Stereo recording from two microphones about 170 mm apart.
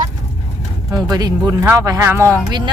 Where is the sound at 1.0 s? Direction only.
25° right (ahead or behind).